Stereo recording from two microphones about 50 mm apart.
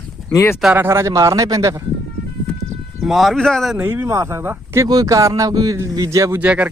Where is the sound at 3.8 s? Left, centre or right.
Right.